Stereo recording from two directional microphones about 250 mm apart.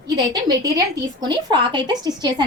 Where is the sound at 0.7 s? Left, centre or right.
Centre.